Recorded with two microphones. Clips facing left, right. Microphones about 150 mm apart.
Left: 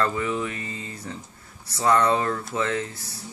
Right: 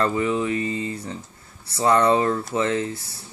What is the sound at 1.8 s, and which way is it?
Speech, 25° right (ahead or behind).